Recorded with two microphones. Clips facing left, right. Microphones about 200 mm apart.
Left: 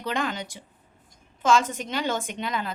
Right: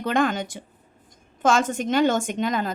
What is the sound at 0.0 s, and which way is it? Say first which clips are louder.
A woman's voice: right 6 dB; 50° right (ahead or behind).